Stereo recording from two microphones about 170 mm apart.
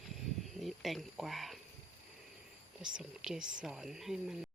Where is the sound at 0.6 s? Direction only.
Centre (ahead or behind).